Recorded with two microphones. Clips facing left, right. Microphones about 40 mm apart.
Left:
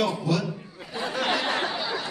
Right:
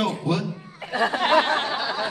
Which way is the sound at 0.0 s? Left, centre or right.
Right.